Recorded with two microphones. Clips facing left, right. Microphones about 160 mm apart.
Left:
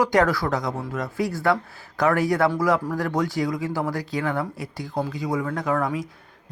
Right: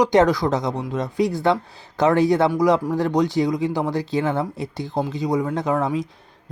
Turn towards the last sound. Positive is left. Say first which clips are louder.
# right 3 dB
turn(degrees=-20)  # may be behind; listen again after turning